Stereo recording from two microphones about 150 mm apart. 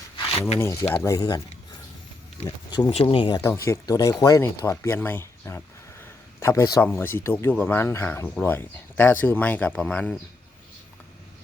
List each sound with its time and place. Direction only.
0.6 s speech: 20° left (ahead or behind)
2.6 s speech: 30° left (ahead or behind)
3.3 s speech: 20° left (ahead or behind)